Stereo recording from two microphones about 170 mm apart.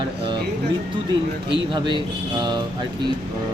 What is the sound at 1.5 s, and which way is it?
Speech, 30° right (ahead or behind).